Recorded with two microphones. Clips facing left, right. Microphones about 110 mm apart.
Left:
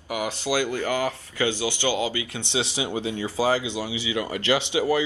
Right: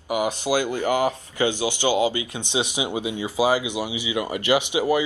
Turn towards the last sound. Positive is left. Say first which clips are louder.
# right 2 dB
turn(degrees=-15)  # may be behind; listen again after turning